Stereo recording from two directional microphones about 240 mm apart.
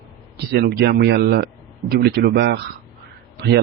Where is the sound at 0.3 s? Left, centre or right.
Right.